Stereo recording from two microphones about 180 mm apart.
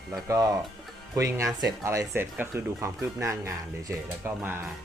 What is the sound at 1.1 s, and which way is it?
Speech, 15° right (ahead or behind).